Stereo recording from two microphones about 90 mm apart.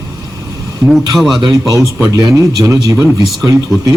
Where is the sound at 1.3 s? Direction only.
45° right (ahead or behind).